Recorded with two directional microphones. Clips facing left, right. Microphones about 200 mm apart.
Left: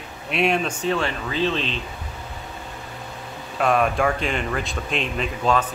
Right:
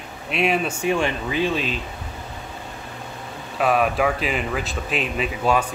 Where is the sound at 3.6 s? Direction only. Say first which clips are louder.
Even; 5° right (ahead or behind).